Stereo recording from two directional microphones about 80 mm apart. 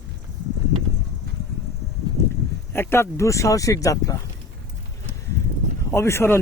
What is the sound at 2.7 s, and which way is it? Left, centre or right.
Speech, left.